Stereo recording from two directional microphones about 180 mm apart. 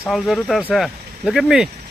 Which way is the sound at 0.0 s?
Centre (ahead or behind).